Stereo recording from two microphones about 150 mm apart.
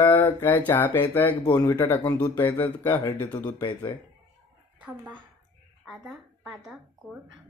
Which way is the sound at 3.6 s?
35° left (ahead or behind).